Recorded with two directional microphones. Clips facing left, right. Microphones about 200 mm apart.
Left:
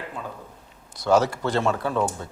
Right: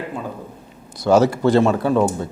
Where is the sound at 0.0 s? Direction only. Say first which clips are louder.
Right 7 dB; 15° right (ahead or behind).